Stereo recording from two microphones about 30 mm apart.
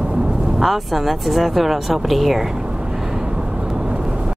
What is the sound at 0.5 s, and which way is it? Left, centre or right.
Speech, centre.